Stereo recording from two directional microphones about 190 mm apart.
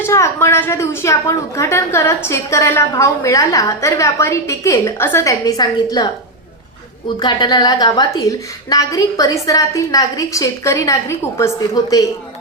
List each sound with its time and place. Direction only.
0.0 s a woman's voice: 15° left (ahead or behind)
7.2 s a woman's voice: 25° left (ahead or behind)